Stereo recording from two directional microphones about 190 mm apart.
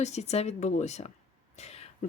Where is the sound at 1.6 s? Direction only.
35° left (ahead or behind).